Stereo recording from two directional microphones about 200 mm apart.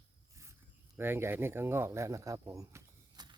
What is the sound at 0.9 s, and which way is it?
Speech, 10° right (ahead or behind).